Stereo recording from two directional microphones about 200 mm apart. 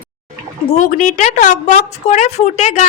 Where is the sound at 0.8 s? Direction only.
40° left (ahead or behind).